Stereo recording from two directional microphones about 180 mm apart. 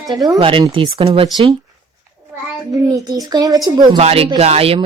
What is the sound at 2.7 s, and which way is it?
Speech, 20° right (ahead or behind).